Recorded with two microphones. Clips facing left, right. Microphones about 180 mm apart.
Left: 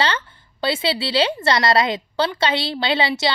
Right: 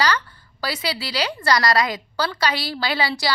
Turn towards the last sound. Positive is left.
turn(degrees=25)  # may be behind; listen again after turning